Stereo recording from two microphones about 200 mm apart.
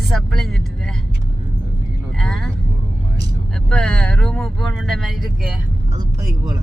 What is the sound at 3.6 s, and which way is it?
Speech, 5° left (ahead or behind).